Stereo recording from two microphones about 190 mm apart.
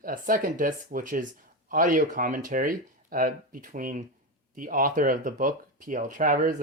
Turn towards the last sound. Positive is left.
turn(degrees=-45)  # may be behind; listen again after turning